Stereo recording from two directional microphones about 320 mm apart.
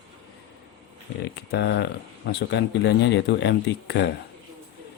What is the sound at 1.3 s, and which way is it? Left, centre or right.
Speech, left.